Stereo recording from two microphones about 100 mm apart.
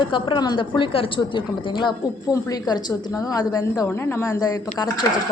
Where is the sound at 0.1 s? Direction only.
50° left (ahead or behind).